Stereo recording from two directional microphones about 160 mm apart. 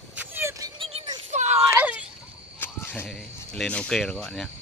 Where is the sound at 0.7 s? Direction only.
35° right (ahead or behind).